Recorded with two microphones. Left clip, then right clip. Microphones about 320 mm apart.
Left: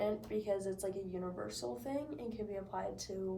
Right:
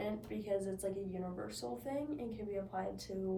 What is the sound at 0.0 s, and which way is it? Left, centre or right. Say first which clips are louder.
A woman's voice: left 5 dB; centre.